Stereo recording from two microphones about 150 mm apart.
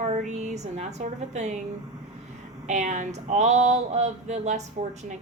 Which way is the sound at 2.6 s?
50° right (ahead or behind).